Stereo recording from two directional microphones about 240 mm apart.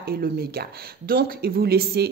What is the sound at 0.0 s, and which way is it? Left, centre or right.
Speech, right.